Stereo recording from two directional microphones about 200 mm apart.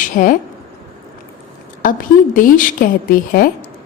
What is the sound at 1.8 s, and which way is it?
A woman's voice, 45° left (ahead or behind).